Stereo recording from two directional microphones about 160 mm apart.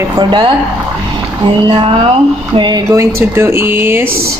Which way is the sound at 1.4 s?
30° right (ahead or behind).